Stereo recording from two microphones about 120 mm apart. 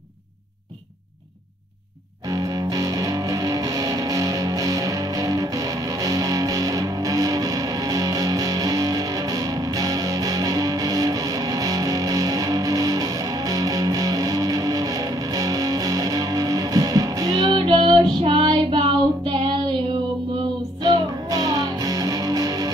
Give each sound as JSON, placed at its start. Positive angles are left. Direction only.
{"t": 2.2, "sound": "music", "side_deg": -25}
{"t": 17.6, "sound": "child singing", "side_deg": -50}
{"t": 20.8, "sound": "music", "side_deg": -30}